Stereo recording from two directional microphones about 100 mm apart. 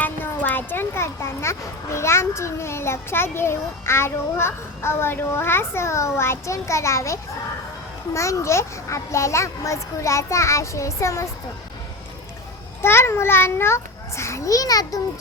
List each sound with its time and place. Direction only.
0.0 s a child's voice: 20° left (ahead or behind)
12.8 s a child's voice: 25° left (ahead or behind)